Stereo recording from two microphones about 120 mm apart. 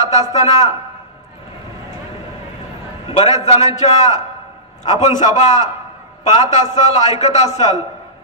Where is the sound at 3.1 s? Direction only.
60° left (ahead or behind).